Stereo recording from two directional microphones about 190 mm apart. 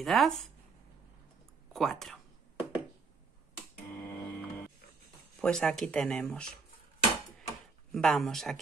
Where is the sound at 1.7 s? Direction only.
Centre (ahead or behind).